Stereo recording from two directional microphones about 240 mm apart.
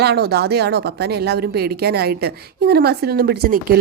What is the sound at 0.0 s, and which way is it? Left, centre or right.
A woman's voice, right.